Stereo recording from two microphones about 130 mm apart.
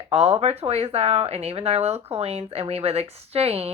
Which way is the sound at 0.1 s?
55° right (ahead or behind).